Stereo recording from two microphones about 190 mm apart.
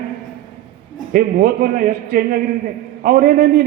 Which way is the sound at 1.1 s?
45° right (ahead or behind).